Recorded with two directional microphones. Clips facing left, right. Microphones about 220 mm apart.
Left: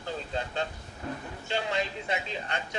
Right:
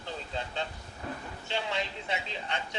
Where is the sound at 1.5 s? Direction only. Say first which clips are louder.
Left 3 dB; 45° left (ahead or behind).